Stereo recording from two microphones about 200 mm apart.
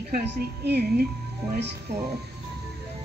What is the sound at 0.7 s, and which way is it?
Speech, 55° right (ahead or behind).